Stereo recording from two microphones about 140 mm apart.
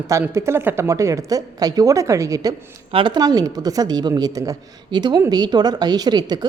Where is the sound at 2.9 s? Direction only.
35° right (ahead or behind).